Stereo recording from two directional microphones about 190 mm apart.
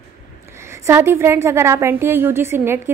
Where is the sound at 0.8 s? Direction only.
15° right (ahead or behind).